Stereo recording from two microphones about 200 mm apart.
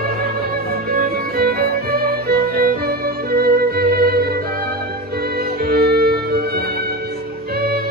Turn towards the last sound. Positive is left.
turn(degrees=-50)  # may be behind; listen again after turning